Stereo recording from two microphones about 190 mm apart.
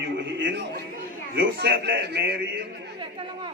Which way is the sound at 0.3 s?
65° right (ahead or behind).